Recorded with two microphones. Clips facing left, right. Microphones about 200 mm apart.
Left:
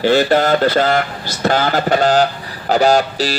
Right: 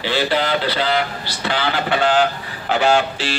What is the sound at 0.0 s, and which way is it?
Speech, 45° left (ahead or behind).